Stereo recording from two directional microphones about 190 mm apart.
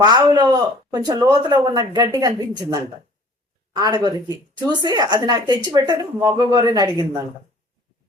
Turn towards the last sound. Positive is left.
turn(degrees=-20)  # may be behind; listen again after turning